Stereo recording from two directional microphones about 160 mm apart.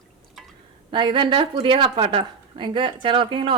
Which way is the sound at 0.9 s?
30° right (ahead or behind).